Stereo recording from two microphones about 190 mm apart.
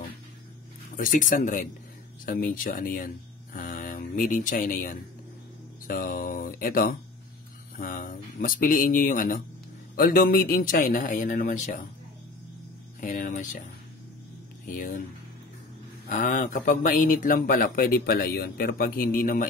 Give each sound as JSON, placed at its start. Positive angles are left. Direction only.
{"t": 0.9, "sound": "speech", "side_deg": 45}
{"t": 3.5, "sound": "a sound", "side_deg": 45}
{"t": 5.9, "sound": "speech", "side_deg": 45}
{"t": 13.0, "sound": "speech", "side_deg": 45}
{"t": 14.7, "sound": "speech", "side_deg": 45}
{"t": 16.1, "sound": "speech", "side_deg": 45}